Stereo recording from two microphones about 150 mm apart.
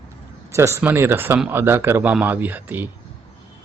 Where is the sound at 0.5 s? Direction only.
15° right (ahead or behind).